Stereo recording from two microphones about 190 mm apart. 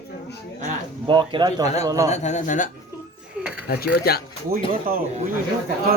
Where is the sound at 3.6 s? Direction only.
55° left (ahead or behind).